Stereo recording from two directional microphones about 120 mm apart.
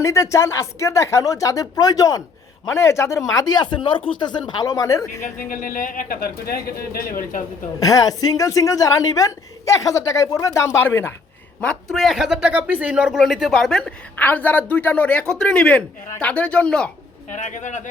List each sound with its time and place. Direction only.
0.0 s a woman's voice: 25° left (ahead or behind)
5.2 s speech: 90° left
7.8 s a woman's voice: 30° left (ahead or behind)
11.6 s speech: 5° left (ahead or behind)
17.2 s speech: 90° left